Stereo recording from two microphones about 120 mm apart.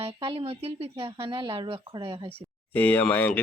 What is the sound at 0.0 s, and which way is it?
Speech, 45° right (ahead or behind).